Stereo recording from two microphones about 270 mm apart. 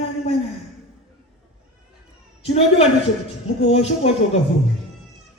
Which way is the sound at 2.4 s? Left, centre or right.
Left.